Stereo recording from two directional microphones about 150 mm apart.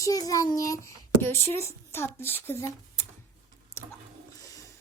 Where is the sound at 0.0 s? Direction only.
25° left (ahead or behind).